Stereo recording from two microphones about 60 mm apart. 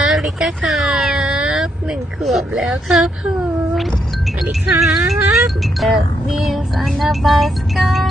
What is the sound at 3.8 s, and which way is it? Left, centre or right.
Music, centre.